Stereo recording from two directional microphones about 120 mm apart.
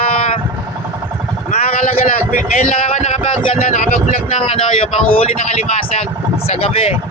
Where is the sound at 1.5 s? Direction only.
90° left; by 3.6 s 60° left (ahead or behind).